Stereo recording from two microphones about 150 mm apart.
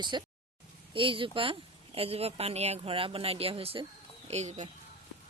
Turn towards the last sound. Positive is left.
turn(degrees=-50)  # may be behind; listen again after turning